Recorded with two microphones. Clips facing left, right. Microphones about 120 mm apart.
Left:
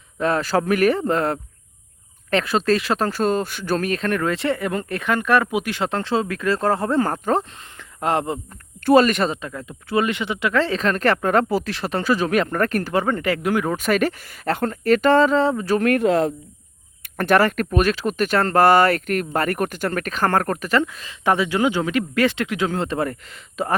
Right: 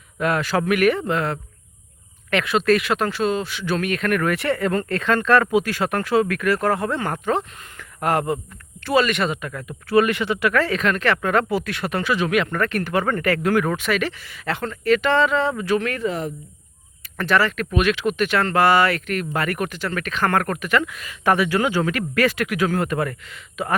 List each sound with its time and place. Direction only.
0.2 s speech: 35° left (ahead or behind)
7.8 s speech: 25° left (ahead or behind)
8.8 s speech: 45° left (ahead or behind)
12.9 s speech: 20° left (ahead or behind)
13.7 s speech: 45° left (ahead or behind)
15.9 s speech: 70° left (ahead or behind)
17.0 s speech: 50° left (ahead or behind); by 23.7 s 35° left (ahead or behind)